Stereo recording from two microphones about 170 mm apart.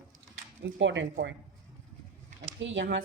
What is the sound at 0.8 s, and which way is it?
Speech, 90° right.